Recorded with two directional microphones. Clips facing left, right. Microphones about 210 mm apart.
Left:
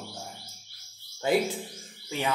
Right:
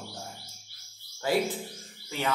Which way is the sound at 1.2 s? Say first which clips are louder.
Left 2 dB; 20° left (ahead or behind).